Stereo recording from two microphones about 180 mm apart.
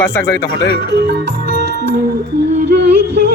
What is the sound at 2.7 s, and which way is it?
Music, 70° right (ahead or behind).